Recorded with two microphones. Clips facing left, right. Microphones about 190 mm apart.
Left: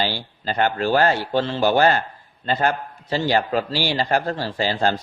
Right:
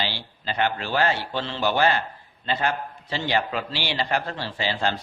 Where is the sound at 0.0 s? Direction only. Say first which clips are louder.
Left 5 dB; 45° left (ahead or behind).